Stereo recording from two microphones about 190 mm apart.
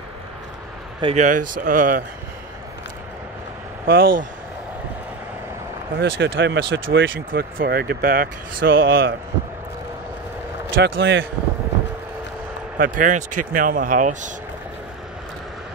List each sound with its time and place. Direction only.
1.0 s speech: 40° right (ahead or behind)
3.8 s speech: 50° right (ahead or behind)
5.9 s speech: 70° right (ahead or behind)
7.2 s speech: 50° right (ahead or behind)
10.7 s speech: 70° right (ahead or behind)
12.7 s speech: 45° right (ahead or behind)